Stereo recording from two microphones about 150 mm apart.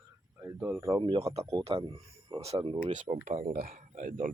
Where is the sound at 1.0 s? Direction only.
40° right (ahead or behind).